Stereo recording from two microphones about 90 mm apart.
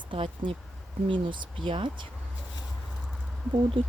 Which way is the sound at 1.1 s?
65° right (ahead or behind).